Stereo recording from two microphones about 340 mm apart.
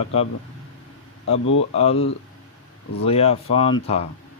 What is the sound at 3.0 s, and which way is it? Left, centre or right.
Speech, centre.